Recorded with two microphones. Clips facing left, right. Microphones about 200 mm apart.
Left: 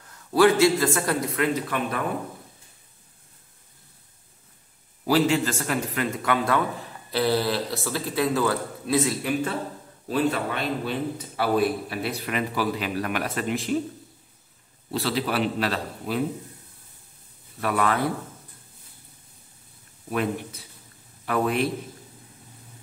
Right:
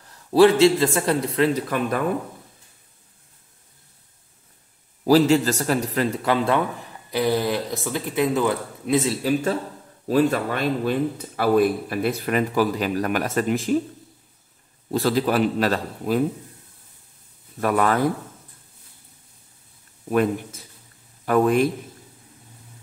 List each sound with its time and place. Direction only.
0.3 s speech: 30° right (ahead or behind)
5.0 s speech: 40° right (ahead or behind)
7.1 s speech: 15° right (ahead or behind)
9.0 s speech: 30° right (ahead or behind)
10.0 s a man's voice: 45° right (ahead or behind)
14.9 s a man's voice: 45° right (ahead or behind)
17.6 s a man's voice: 45° right (ahead or behind)
20.1 s a man's voice: 45° right (ahead or behind)